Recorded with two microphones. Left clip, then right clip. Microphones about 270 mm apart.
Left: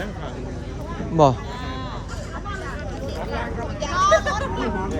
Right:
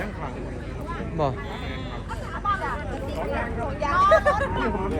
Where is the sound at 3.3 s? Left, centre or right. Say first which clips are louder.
Even; right.